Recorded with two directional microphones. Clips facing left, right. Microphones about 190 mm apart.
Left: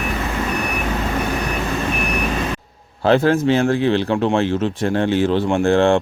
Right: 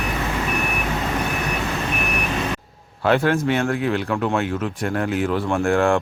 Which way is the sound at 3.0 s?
30° left (ahead or behind).